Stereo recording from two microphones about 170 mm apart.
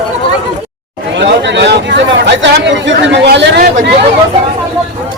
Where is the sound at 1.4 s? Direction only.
90° right.